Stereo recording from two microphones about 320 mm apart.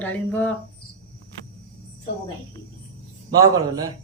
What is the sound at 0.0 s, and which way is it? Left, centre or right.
Speech, centre.